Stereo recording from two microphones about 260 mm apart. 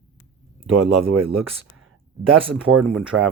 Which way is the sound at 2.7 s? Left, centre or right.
Right.